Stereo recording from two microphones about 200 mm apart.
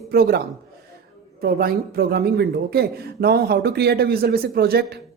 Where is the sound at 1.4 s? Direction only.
50° right (ahead or behind).